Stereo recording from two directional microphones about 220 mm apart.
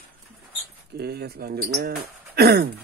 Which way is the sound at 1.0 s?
45° right (ahead or behind).